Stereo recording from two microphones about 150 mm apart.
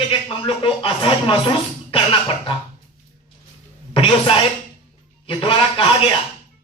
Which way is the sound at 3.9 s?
35° left (ahead or behind).